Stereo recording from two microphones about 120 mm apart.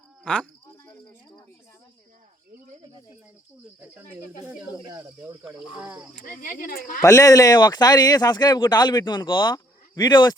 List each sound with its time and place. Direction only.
7.0 s speech: 30° left (ahead or behind)